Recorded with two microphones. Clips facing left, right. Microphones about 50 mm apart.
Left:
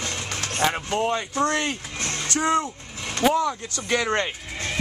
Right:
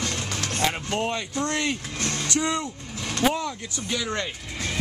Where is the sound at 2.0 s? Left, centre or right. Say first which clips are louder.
Right 1 dB; centre.